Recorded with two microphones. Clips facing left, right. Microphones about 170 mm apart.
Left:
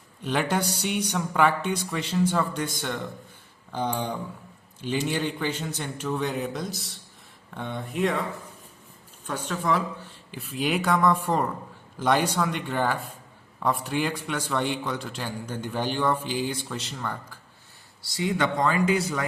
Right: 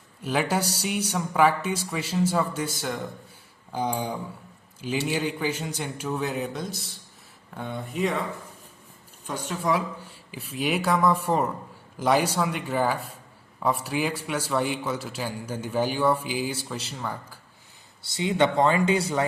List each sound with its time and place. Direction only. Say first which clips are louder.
0.2 s a man's voice: even; 5° right (ahead or behind)
9.2 s a man's voice: even; 10° right (ahead or behind)
18.0 s speech: right 3 dB; 25° right (ahead or behind)